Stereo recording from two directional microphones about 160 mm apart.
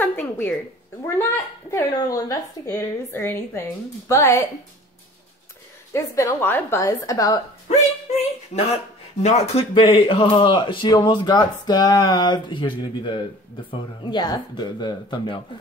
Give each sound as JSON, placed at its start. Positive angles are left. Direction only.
{"t": 0.0, "sound": "a sound", "side_deg": 10}
{"t": 1.0, "sound": "a woman's voice", "side_deg": 15}
{"t": 5.9, "sound": "speech", "side_deg": 20}
{"t": 8.1, "sound": "speech", "side_deg": 40}